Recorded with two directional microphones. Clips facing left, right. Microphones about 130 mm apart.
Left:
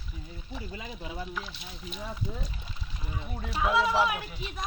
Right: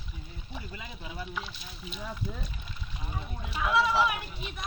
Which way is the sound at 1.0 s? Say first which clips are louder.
Left 2 dB; 20° left (ahead or behind).